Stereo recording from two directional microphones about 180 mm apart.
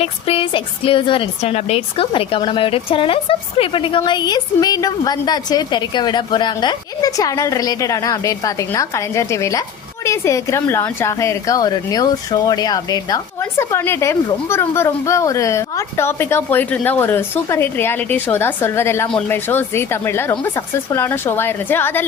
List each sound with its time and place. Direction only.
0.0 s a woman's voice: 30° left (ahead or behind); by 22.0 s 10° left (ahead or behind)